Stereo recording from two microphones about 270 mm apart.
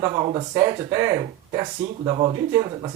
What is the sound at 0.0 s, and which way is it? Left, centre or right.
Speech, centre.